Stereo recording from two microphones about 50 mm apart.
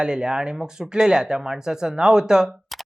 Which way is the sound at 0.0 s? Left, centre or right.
Centre.